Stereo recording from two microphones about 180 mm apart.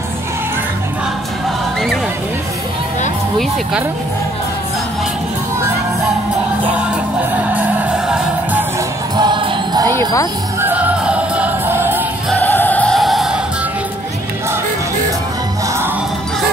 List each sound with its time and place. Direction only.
7.2 s music: 10° right (ahead or behind)
9.1 s music: 25° right (ahead or behind)
9.8 s wind chime: 15° left (ahead or behind)
10.6 s music: 10° right (ahead or behind)
12.3 s music: 10° left (ahead or behind)